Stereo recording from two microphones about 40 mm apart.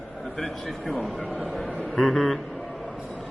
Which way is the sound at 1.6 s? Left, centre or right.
Left.